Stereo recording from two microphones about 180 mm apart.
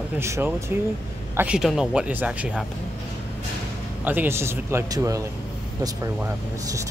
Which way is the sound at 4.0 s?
10° right (ahead or behind).